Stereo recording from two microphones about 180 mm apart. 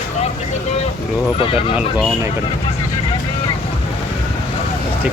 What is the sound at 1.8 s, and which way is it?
Speech, 5° right (ahead or behind).